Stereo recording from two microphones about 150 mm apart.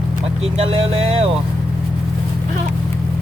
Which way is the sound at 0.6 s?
40° right (ahead or behind).